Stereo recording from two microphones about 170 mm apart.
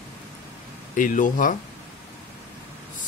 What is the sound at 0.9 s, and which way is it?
Speech, 50° left (ahead or behind).